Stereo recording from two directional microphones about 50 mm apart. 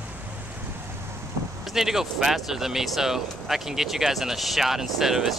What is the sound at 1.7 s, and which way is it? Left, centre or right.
Speech, centre.